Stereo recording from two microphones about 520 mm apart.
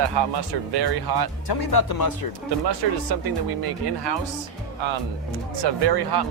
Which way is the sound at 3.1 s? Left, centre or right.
Right.